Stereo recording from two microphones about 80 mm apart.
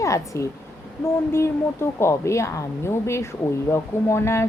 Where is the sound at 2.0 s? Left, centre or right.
Left.